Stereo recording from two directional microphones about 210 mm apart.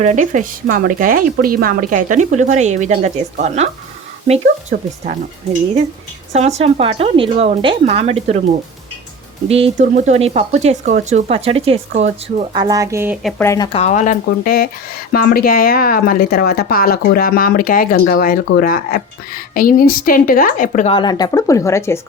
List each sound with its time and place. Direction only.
0.0 s speech: 35° right (ahead or behind)
4.7 s speech: 40° right (ahead or behind)
6.3 s speech: 30° right (ahead or behind)
9.5 s speech: 30° right (ahead or behind)
12.5 s speech: 15° right (ahead or behind)
13.4 s speech: 15° left (ahead or behind)
13.7 s speech: 35° left (ahead or behind); by 22.0 s 10° left (ahead or behind)